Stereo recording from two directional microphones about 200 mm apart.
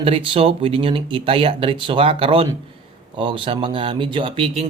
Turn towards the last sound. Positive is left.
turn(degrees=-30)  # may be behind; listen again after turning